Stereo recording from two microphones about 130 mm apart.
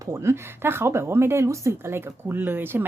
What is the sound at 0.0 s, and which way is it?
Speech, 20° right (ahead or behind).